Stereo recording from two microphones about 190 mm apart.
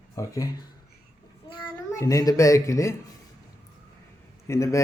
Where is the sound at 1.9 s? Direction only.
20° left (ahead or behind).